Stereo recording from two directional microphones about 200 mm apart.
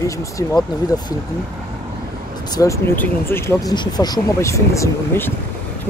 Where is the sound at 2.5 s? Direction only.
15° left (ahead or behind).